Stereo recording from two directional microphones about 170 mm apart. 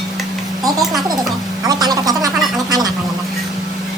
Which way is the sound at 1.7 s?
25° right (ahead or behind).